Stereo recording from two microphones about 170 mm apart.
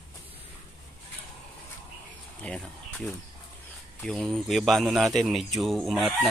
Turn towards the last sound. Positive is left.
turn(degrees=0)  # may be behind; listen again after turning